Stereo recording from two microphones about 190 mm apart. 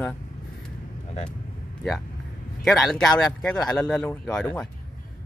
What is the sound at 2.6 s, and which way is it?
Speech, centre (ahead or behind).